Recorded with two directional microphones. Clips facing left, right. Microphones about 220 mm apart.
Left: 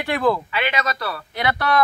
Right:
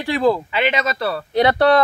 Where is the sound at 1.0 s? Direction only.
30° right (ahead or behind).